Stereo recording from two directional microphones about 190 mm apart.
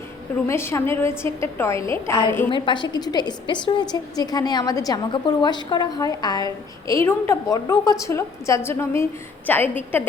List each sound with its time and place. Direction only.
0.4 s a woman's voice: 15° left (ahead or behind)
2.5 s a woman's voice: 25° left (ahead or behind); by 10.0 s 10° left (ahead or behind)